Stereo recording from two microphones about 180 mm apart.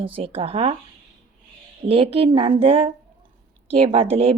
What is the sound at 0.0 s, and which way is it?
Speech, 30° right (ahead or behind).